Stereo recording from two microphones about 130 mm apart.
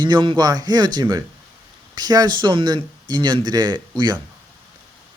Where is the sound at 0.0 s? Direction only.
35° right (ahead or behind).